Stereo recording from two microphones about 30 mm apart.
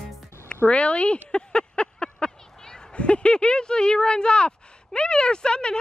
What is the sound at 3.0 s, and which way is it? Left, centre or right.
Speech, left.